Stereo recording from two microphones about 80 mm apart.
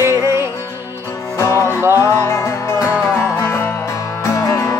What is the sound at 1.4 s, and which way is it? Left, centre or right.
Music, left.